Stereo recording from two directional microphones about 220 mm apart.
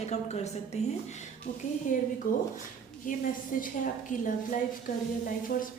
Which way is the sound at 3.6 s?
35° left (ahead or behind).